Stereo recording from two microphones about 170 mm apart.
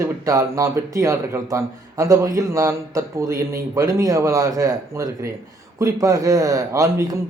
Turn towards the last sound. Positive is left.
turn(degrees=-20)  # may be behind; listen again after turning